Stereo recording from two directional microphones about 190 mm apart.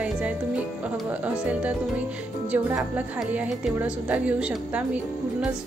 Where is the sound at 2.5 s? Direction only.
5° right (ahead or behind).